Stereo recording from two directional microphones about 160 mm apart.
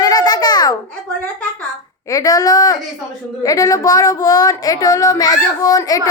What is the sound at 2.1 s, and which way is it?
Speech, 20° left (ahead or behind).